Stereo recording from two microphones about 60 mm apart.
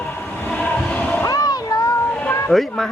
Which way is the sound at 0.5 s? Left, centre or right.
Left.